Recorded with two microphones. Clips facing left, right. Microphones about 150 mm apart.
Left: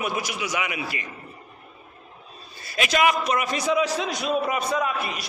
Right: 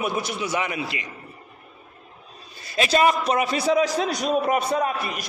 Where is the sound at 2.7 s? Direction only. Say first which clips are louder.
Right 2 dB; 35° right (ahead or behind).